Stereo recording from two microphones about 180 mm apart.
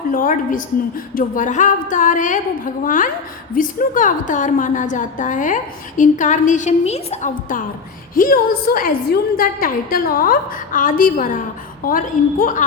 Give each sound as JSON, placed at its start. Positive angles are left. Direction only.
{"t": 0.1, "sound": "a woman's voice", "side_deg": 50}